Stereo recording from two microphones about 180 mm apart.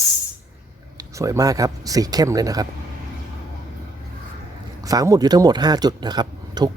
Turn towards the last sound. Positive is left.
turn(degrees=-25)  # may be behind; listen again after turning